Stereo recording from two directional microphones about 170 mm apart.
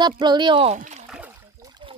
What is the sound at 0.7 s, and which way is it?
Speech, 45° right (ahead or behind).